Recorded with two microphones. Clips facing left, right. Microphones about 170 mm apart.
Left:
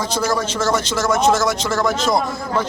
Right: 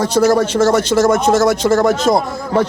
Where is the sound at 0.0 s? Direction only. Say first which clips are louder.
Right 8 dB; 65° right (ahead or behind).